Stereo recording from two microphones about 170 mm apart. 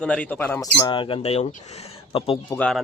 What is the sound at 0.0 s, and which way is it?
Speech, 5° left (ahead or behind).